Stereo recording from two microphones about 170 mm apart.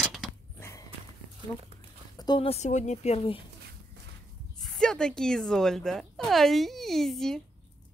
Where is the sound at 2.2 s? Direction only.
30° left (ahead or behind).